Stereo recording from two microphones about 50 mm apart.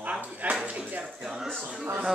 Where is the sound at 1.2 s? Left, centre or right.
Centre.